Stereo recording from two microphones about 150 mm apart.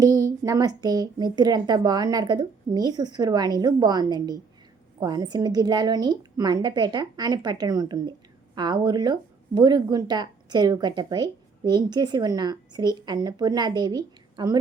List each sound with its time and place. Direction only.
0.0 s a woman's voice: 25° right (ahead or behind)